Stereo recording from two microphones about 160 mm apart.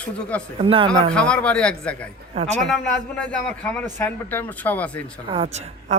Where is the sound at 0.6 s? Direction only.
35° right (ahead or behind).